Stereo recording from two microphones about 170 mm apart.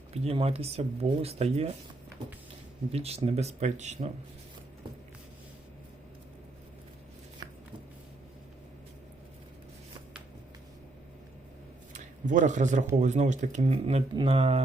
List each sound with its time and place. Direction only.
0.1 s speech: 35° right (ahead or behind)
2.9 s speech: 35° right (ahead or behind)
11.9 s a man's voice: 50° right (ahead or behind)